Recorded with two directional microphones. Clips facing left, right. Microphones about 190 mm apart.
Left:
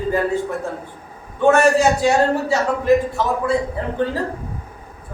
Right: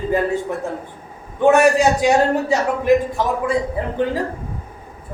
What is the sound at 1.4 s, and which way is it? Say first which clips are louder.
A man's voice: right 1 dB; 15° right (ahead or behind).